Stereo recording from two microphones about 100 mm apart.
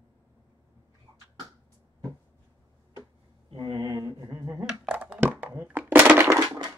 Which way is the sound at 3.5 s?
55° right (ahead or behind).